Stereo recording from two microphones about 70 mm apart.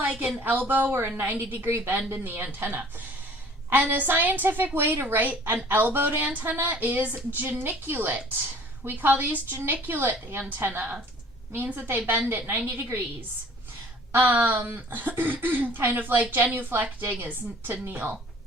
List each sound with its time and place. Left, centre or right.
0.0 s a woman's voice: centre
14.1 s speech: right